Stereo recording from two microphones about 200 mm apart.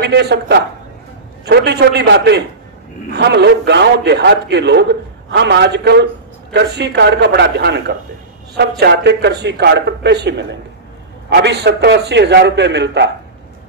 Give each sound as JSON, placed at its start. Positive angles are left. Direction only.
{"t": 0.0, "sound": "a man's voice", "side_deg": -55}